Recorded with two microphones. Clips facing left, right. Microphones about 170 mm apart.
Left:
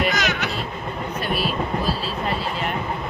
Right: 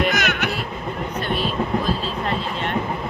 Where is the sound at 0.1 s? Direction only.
55° right (ahead or behind).